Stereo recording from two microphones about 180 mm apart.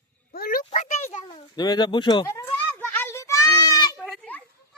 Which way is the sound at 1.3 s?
25° left (ahead or behind).